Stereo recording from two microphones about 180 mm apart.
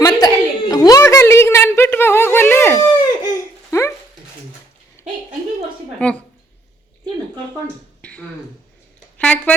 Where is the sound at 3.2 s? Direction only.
15° left (ahead or behind).